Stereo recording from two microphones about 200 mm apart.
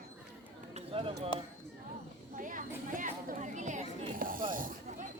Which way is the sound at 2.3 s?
40° right (ahead or behind).